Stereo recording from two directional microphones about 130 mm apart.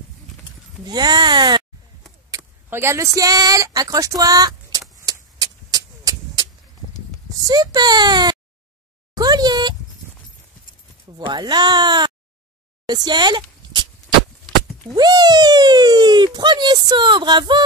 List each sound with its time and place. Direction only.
0.8 s a sound: 35° right (ahead or behind)
2.3 s speech: 20° right (ahead or behind)
5.0 s vehicle: 30° right (ahead or behind)
7.4 s speech: 30° right (ahead or behind)
9.1 s a sound: 30° right (ahead or behind)
11.1 s speech: 35° right (ahead or behind)
15.0 s speech: 30° right (ahead or behind)